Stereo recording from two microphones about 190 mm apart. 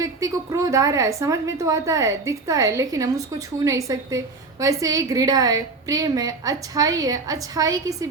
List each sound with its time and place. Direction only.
0.0 s a woman's voice: 20° right (ahead or behind)